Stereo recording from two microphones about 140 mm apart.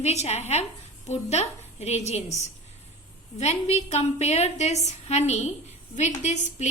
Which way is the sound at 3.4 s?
50° left (ahead or behind).